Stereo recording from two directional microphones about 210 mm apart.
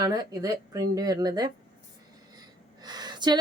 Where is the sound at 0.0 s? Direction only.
20° right (ahead or behind).